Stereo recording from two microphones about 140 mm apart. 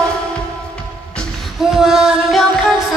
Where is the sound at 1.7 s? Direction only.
5° right (ahead or behind).